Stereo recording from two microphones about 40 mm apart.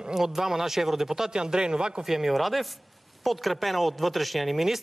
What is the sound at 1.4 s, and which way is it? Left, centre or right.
Speech, right.